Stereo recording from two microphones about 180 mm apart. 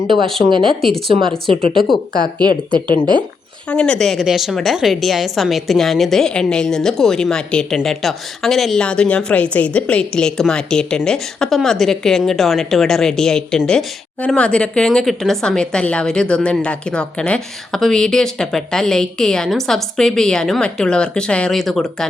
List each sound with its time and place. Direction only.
0.4 s speech: 25° right (ahead or behind)
3.7 s a woman's voice: 5° left (ahead or behind)